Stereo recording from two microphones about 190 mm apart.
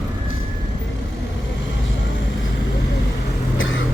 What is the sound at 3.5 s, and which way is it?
Vehicle, 90° left.